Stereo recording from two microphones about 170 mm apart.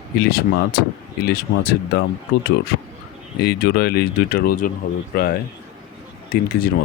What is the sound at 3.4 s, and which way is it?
Speech, 70° left (ahead or behind).